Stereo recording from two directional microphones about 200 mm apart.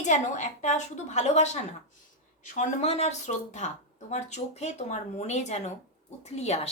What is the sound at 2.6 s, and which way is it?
A woman's voice, 30° left (ahead or behind).